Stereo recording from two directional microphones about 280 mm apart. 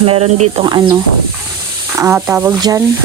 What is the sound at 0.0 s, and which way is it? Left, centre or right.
Speech, right.